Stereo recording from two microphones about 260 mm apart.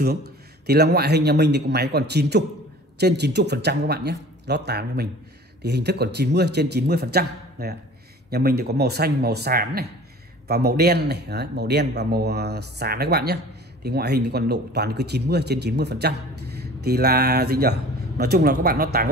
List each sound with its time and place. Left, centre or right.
0.7 s a man's voice: right